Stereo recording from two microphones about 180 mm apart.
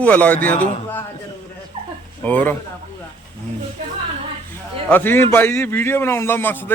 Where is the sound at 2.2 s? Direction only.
10° left (ahead or behind).